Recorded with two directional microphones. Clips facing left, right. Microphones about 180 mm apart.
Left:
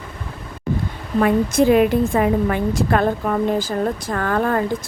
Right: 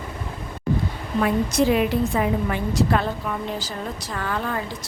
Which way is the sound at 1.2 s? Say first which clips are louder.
Left 5 dB; 50° left (ahead or behind).